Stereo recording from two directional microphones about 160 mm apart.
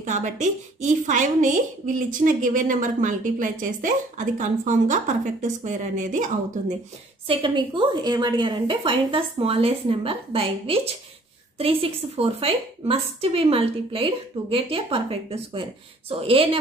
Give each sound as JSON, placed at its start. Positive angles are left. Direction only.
{"t": 0.0, "sound": "a woman's voice", "side_deg": -50}
{"t": 7.2, "sound": "a woman's voice", "side_deg": -30}